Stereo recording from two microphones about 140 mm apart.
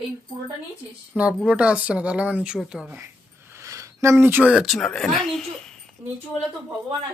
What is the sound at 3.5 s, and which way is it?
Speech, 20° right (ahead or behind).